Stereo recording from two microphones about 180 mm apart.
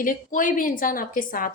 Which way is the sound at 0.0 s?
45° left (ahead or behind).